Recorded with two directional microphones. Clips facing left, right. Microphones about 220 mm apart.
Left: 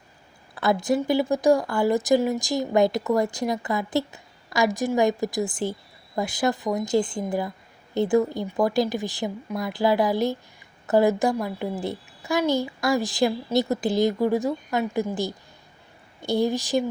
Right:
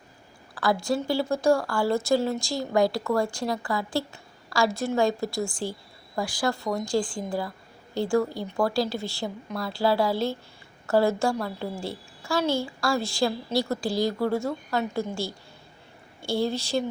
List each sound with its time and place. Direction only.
0.5 s a woman's voice: 20° left (ahead or behind)